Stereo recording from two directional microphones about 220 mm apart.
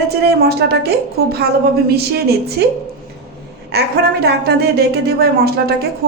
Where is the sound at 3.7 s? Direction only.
45° right (ahead or behind).